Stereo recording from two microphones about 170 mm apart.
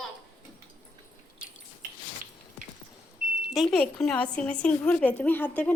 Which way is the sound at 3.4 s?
Centre (ahead or behind).